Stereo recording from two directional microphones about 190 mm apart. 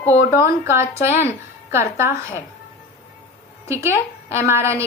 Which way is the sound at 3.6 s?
15° right (ahead or behind).